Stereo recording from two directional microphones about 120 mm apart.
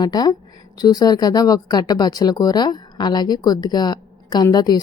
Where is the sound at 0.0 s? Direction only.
30° left (ahead or behind).